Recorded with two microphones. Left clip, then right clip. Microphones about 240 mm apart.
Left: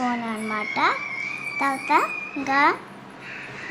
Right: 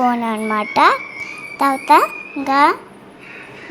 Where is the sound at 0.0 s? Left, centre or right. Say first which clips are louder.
Right 9 dB; right.